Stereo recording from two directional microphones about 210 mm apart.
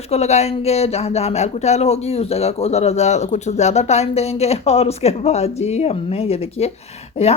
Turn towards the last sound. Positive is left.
turn(degrees=30)  # may be behind; listen again after turning